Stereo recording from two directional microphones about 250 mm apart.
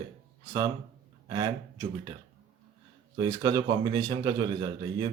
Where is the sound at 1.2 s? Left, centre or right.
Centre.